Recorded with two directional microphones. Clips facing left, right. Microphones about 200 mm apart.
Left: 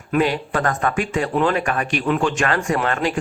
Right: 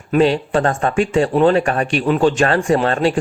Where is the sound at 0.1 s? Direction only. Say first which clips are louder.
Right 5 dB; 30° right (ahead or behind).